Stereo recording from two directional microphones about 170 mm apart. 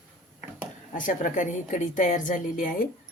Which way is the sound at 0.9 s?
50° left (ahead or behind).